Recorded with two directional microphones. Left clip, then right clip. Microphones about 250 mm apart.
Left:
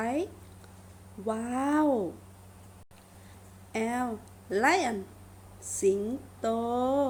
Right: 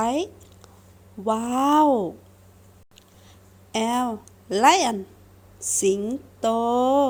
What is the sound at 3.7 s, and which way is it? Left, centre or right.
Speech, right.